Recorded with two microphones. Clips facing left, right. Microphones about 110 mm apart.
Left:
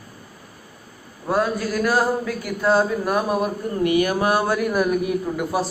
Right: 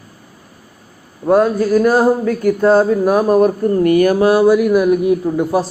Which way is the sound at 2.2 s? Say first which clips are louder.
Right 12 dB; 45° right (ahead or behind).